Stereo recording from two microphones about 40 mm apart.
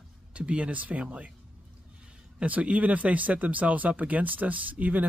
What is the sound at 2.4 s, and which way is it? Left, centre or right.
Speech, right.